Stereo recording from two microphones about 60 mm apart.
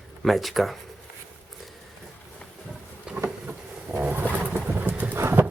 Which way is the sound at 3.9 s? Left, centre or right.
Right.